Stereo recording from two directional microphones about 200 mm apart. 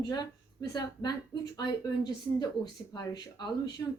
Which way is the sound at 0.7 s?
20° left (ahead or behind).